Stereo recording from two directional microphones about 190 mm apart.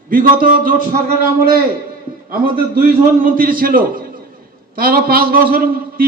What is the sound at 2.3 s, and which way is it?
A man's voice, 50° right (ahead or behind).